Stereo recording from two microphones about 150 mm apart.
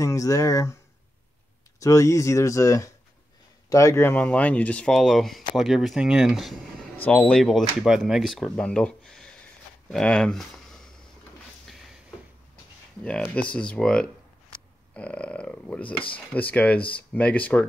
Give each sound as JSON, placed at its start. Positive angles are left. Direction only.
{"t": 0.0, "sound": "speech", "side_deg": 20}
{"t": 1.8, "sound": "speech", "side_deg": 20}
{"t": 8.5, "sound": "a sound", "side_deg": 5}
{"t": 9.8, "sound": "speech", "side_deg": 5}
{"t": 13.0, "sound": "speech", "side_deg": 10}